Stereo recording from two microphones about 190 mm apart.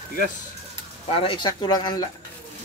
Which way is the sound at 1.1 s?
30° left (ahead or behind).